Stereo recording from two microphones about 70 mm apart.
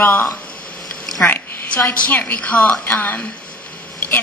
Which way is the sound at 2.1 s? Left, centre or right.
Left.